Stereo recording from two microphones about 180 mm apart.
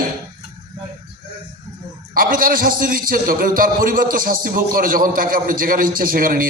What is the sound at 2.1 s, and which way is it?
A man's voice, 55° right (ahead or behind).